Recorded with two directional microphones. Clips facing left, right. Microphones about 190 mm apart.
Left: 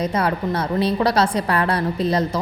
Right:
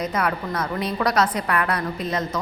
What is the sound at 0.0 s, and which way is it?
A woman's voice, 30° left (ahead or behind).